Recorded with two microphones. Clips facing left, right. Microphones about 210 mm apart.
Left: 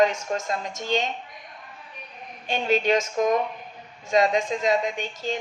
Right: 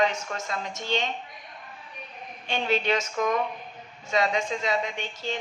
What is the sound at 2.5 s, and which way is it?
A woman's voice, 45° left (ahead or behind).